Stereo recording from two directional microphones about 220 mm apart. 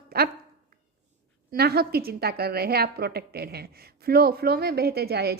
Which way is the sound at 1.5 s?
45° right (ahead or behind).